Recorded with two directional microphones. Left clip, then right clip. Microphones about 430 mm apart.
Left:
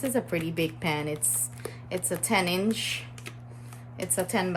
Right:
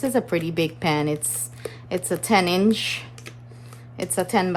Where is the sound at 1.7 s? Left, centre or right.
Right.